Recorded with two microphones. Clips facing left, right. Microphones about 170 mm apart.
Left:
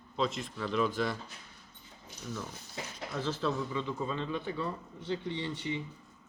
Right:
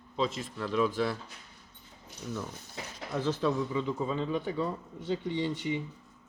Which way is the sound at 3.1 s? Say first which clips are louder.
Right 4 dB; 15° right (ahead or behind).